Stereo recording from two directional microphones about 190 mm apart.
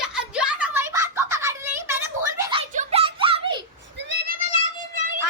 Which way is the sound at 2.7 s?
35° right (ahead or behind).